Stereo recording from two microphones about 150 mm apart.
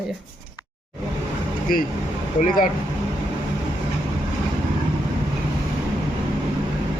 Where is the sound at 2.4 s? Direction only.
65° left (ahead or behind).